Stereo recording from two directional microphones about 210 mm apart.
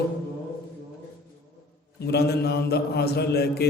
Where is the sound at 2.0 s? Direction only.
50° left (ahead or behind).